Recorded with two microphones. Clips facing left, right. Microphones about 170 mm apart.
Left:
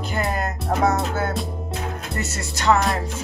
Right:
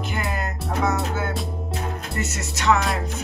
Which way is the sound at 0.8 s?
35° left (ahead or behind).